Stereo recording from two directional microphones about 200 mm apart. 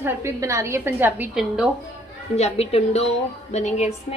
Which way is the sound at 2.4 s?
30° left (ahead or behind).